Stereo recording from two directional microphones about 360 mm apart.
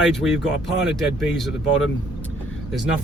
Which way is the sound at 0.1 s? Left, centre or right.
Centre.